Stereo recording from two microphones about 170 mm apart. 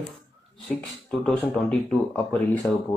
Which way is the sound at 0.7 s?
5° left (ahead or behind).